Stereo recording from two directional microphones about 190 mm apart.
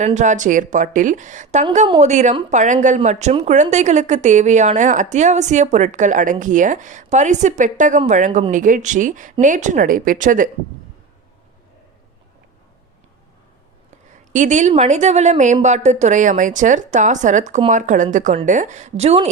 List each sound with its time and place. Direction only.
0.0 s a woman's voice: 40° right (ahead or behind)
13.9 s a woman's voice: 40° right (ahead or behind)